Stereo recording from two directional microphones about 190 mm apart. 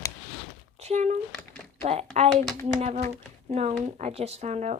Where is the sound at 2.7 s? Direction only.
40° right (ahead or behind).